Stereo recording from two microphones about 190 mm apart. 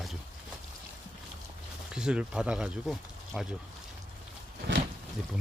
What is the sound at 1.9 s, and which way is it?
Speech, 5° right (ahead or behind).